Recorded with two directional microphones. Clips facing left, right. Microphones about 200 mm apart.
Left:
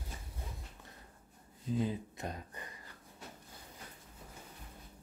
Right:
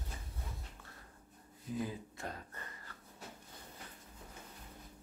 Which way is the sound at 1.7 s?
20° left (ahead or behind).